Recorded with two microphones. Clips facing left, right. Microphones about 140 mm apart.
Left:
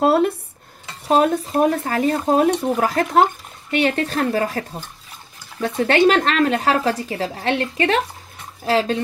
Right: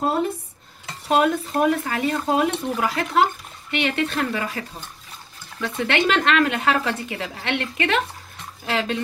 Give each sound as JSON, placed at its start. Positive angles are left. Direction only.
{"t": 0.0, "sound": "speech", "side_deg": 70}
{"t": 1.0, "sound": "speech", "side_deg": 35}